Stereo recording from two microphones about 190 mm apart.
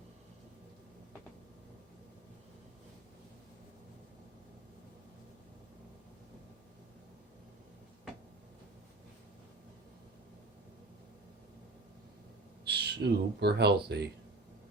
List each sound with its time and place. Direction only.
12.6 s speech: 60° right (ahead or behind)